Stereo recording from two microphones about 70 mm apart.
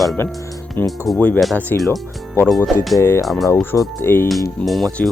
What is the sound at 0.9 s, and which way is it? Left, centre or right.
Speech, centre.